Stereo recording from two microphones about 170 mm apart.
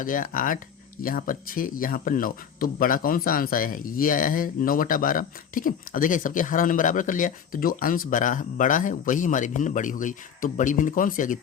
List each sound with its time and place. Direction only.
0.0 s speech: 50° left (ahead or behind)